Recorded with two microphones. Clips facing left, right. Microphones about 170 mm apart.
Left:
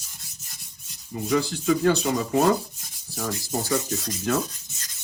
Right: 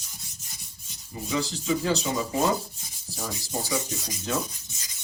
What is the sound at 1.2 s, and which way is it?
Speech, 55° left (ahead or behind).